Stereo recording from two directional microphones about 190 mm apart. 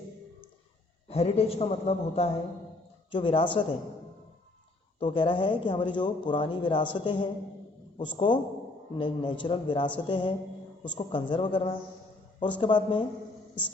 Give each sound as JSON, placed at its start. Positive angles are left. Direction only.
{"t": 1.0, "sound": "a man's voice", "side_deg": 30}
{"t": 4.9, "sound": "speech", "side_deg": 25}